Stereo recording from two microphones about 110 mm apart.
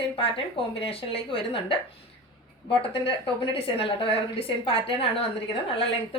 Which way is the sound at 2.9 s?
55° left (ahead or behind).